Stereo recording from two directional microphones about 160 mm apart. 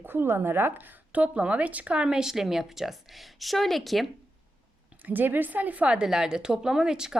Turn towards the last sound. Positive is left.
turn(degrees=-5)  # may be behind; listen again after turning